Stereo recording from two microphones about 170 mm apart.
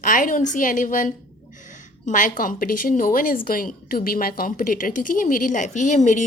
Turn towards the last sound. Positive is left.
turn(degrees=45)  # may be behind; listen again after turning